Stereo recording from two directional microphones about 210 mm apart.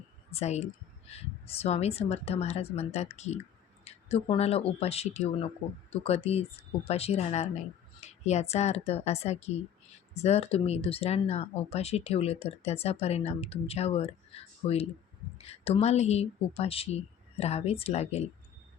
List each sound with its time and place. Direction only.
0.3 s speech: 30° left (ahead or behind)